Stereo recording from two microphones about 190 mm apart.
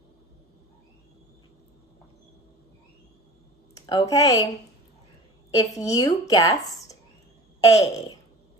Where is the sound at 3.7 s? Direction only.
20° left (ahead or behind).